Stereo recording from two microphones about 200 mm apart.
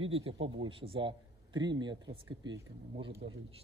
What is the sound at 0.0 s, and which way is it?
A man's voice, 30° right (ahead or behind).